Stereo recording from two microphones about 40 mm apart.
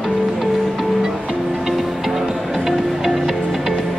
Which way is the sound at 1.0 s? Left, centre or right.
Centre.